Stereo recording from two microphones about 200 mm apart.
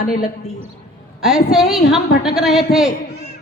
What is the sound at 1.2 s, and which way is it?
A woman's voice, centre (ahead or behind).